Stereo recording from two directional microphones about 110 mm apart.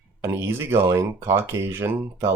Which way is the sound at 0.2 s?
25° right (ahead or behind).